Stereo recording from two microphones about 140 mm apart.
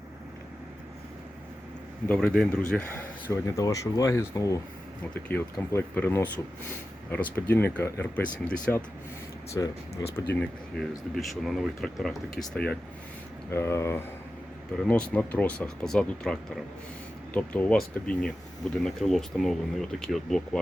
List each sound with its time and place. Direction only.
2.0 s speech: 5° left (ahead or behind)
3.4 s speech: 25° left (ahead or behind)
5.1 s speech: 10° left (ahead or behind)
9.6 s speech: 20° left (ahead or behind)
10.4 s speech: 5° left (ahead or behind)
13.5 s speech: 20° left (ahead or behind)
14.8 s speech: 5° left (ahead or behind)